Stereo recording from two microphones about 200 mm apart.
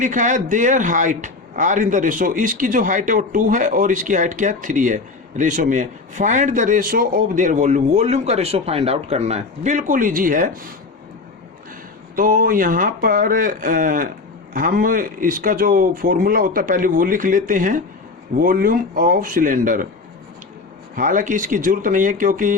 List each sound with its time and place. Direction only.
0.0 s speech: 40° right (ahead or behind)
12.1 s speech: 45° right (ahead or behind)
20.9 s speech: 40° right (ahead or behind)